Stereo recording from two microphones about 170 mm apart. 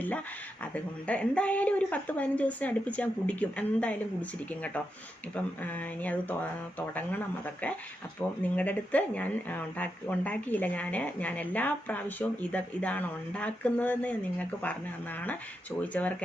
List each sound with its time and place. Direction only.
0.6 s a woman's voice: 10° left (ahead or behind)
6.0 s a woman's voice: 10° left (ahead or behind)
8.5 s a woman's voice: 10° left (ahead or behind)
15.8 s a woman's voice: 10° left (ahead or behind)